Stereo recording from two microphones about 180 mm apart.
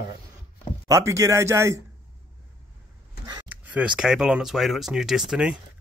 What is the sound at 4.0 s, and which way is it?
Speech, 5° right (ahead or behind).